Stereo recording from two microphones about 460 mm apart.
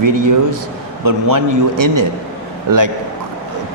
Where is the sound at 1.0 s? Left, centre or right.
Right.